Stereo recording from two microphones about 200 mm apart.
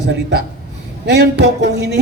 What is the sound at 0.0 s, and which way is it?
A man's voice, 60° right (ahead or behind).